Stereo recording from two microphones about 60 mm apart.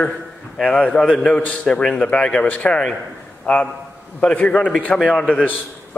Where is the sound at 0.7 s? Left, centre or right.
Centre.